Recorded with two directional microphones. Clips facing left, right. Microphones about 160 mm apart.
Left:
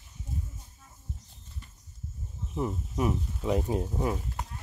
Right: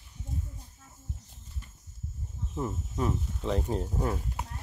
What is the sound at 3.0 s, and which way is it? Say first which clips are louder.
Speech: left 2 dB; 10° left (ahead or behind).